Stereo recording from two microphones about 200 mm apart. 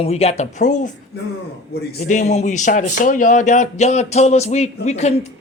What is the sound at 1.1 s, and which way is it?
Speech, 55° left (ahead or behind).